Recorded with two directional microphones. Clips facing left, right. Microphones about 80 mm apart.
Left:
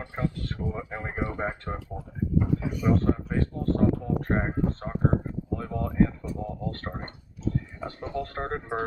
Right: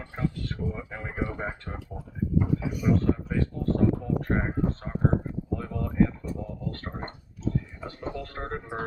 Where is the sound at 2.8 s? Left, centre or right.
Left.